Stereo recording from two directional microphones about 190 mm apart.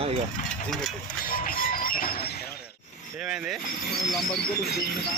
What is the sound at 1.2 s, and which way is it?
Music, 50° left (ahead or behind).